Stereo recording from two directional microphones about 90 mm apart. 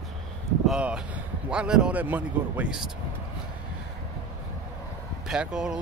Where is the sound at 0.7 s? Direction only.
10° right (ahead or behind).